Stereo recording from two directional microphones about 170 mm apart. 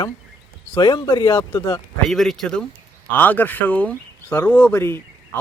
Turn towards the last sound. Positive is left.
turn(degrees=10)  # may be behind; listen again after turning